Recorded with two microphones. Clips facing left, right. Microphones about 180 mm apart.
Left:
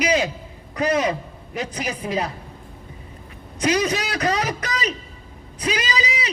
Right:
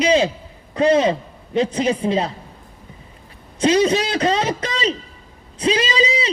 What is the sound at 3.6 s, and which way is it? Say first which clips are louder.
A man's voice: right 5 dB; 25° right (ahead or behind).